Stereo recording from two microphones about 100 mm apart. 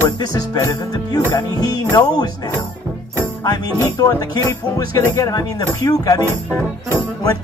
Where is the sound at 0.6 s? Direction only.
35° left (ahead or behind).